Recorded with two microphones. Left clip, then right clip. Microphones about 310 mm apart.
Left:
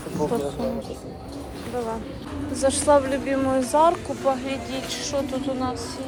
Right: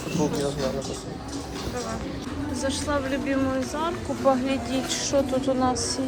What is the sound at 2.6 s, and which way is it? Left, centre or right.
Speech, centre.